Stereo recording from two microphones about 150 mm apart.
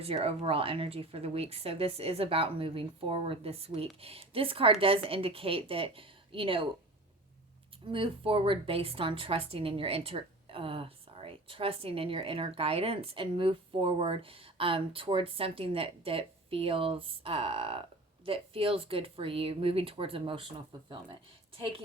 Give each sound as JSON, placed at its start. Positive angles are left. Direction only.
{"t": 0.0, "sound": "a woman's voice", "side_deg": -40}
{"t": 7.9, "sound": "a woman's voice", "side_deg": -35}